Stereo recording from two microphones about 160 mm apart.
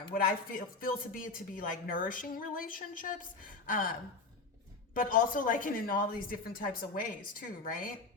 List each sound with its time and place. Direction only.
0.1 s a woman's voice: 60° left (ahead or behind)
4.9 s a woman's voice: 60° left (ahead or behind)